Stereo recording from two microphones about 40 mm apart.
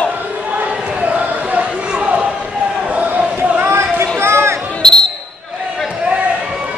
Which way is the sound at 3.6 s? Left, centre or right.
Right.